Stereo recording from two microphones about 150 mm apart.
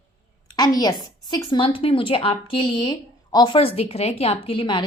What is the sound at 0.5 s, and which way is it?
A woman's voice, 25° left (ahead or behind).